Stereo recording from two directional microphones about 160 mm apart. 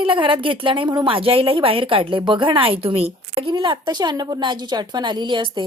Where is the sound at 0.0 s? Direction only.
30° right (ahead or behind).